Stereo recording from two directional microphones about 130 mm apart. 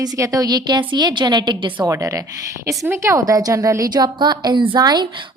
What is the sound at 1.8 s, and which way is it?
A woman's voice, 25° right (ahead or behind).